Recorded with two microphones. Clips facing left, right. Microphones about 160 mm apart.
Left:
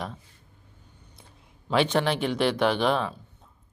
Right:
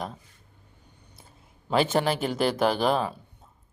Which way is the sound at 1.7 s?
5° right (ahead or behind).